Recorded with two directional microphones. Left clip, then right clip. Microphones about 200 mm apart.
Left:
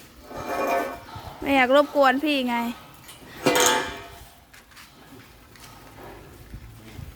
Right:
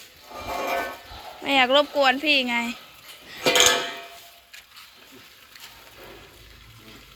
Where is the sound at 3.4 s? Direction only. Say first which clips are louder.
Right 2 dB; 45° left (ahead or behind).